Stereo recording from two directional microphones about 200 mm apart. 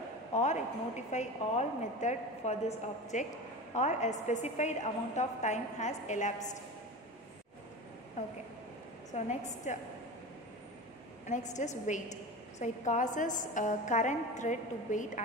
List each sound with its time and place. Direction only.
0.3 s a woman's voice: 35° left (ahead or behind)
9.1 s a woman's voice: 35° left (ahead or behind)
11.2 s a woman's voice: 35° left (ahead or behind)